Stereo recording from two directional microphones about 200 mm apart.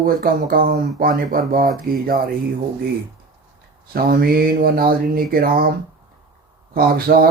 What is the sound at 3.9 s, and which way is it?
Speech, 50° right (ahead or behind).